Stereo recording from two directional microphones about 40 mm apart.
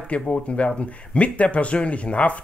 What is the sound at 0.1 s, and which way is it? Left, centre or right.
Speech, left.